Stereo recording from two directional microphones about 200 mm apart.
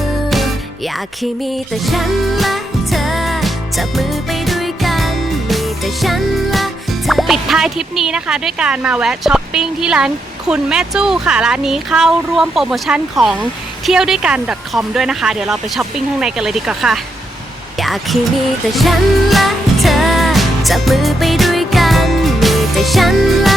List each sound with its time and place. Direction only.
0.3 s music: centre (ahead or behind)
13.8 s speech: 5° right (ahead or behind)
18.7 s music: centre (ahead or behind)